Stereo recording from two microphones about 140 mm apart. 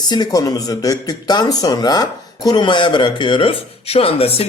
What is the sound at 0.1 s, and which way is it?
Speech, 30° left (ahead or behind).